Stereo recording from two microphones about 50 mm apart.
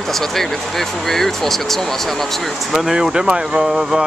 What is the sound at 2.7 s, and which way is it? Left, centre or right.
Speech, centre.